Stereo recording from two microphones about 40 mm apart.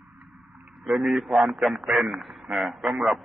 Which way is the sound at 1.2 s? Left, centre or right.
Centre.